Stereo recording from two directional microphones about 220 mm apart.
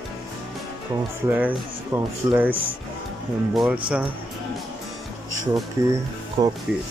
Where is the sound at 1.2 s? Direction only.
10° right (ahead or behind).